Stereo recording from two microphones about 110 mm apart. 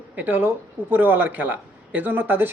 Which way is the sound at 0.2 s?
15° right (ahead or behind).